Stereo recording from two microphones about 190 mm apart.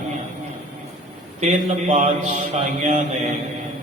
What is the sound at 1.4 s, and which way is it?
A man's voice, 35° right (ahead or behind).